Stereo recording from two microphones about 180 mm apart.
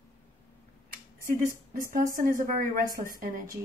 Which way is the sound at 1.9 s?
50° right (ahead or behind).